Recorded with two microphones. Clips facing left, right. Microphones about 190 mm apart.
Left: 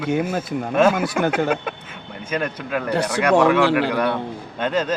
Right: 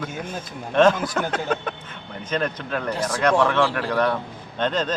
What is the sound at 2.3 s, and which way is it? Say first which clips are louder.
Speech: left 1 dB; 10° left (ahead or behind).